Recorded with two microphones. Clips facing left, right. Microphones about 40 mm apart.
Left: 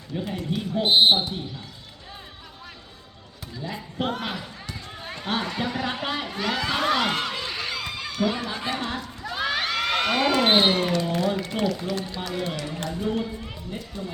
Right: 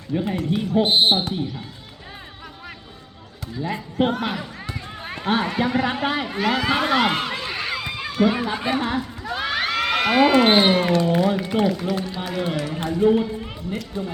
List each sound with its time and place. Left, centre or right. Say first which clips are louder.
0.1 s a man's voice: right 7 dB; right
0.5 s speech: right 6 dB; centre
0.9 s speech: left 3 dB; centre
3.6 s a man's voice: right 8 dB; right
4.2 s a man's voice: right 5 dB; centre